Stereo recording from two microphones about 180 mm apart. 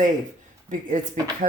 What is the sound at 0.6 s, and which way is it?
Speech, 45° right (ahead or behind).